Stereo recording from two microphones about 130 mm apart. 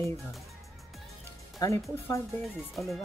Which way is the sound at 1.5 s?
20° left (ahead or behind).